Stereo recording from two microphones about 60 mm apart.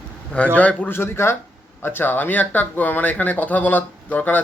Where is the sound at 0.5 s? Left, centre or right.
Left.